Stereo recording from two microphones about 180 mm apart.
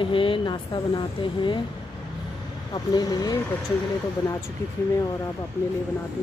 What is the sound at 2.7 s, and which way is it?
Speech, 25° left (ahead or behind).